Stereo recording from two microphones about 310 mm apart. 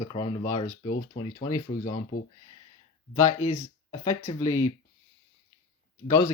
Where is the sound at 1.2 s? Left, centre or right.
Centre.